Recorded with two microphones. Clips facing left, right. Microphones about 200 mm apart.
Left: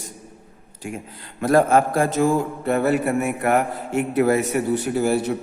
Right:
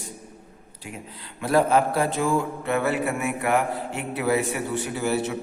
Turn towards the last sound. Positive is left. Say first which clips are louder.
# left 5 dB
turn(degrees=40)  # may be behind; listen again after turning